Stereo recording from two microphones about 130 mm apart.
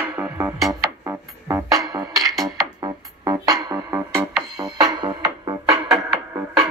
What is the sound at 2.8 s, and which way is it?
Music, 30° right (ahead or behind).